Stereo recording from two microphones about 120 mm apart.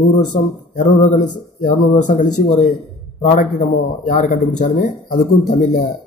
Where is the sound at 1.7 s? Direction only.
90° left.